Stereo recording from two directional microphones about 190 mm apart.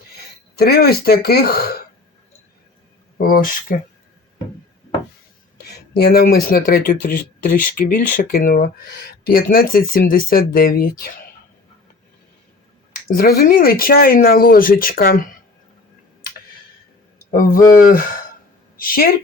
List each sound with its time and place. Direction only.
0.5 s speech: 55° left (ahead or behind)
3.2 s speech: 50° left (ahead or behind)
5.9 s speech: 55° left (ahead or behind)
13.1 s speech: 50° left (ahead or behind)
17.8 s a woman's voice: 50° left (ahead or behind)